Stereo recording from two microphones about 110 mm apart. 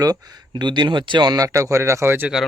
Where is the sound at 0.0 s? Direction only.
35° right (ahead or behind).